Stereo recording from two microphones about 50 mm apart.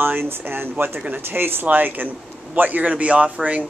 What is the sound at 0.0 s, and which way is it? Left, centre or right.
Speech, right.